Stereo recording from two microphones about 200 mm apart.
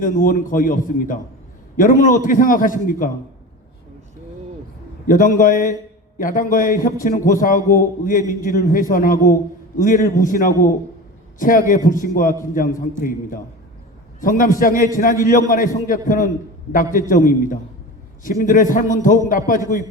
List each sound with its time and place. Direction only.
0.0 s a man's voice: 40° left (ahead or behind)
5.0 s a man's voice: 40° left (ahead or behind)
9.1 s a man's voice: 15° left (ahead or behind)
9.7 s a man's voice: 40° left (ahead or behind)
14.2 s a man's voice: 40° left (ahead or behind)